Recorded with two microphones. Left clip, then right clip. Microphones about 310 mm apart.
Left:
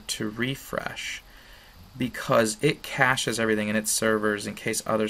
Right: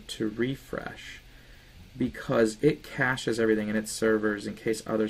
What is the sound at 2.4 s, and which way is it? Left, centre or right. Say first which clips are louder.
Speech: right 1 dB; centre.